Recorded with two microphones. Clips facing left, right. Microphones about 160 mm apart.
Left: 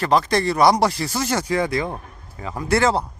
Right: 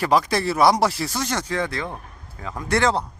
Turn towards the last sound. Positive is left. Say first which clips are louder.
# left 2 dB
turn(degrees=5)  # may be behind; listen again after turning